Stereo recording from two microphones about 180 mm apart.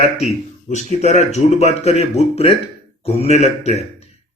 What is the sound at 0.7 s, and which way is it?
A man's voice, 40° left (ahead or behind).